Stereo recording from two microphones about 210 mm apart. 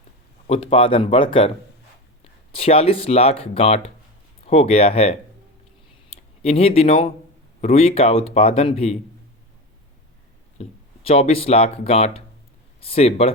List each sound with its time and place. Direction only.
0.4 s speech: 25° left (ahead or behind)
2.6 s speech: 30° left (ahead or behind)
10.6 s speech: 30° left (ahead or behind)